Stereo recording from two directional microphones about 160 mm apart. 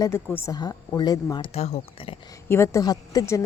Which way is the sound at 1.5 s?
40° left (ahead or behind).